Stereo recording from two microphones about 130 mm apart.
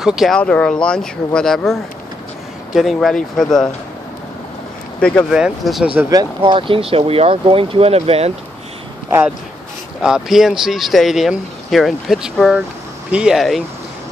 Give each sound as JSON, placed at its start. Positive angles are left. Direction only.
{"t": 0.0, "sound": "speech", "side_deg": -5}
{"t": 0.4, "sound": "speech", "side_deg": 10}
{"t": 5.3, "sound": "speech", "side_deg": -5}
{"t": 6.0, "sound": "speech", "side_deg": -35}
{"t": 10.0, "sound": "speech", "side_deg": -5}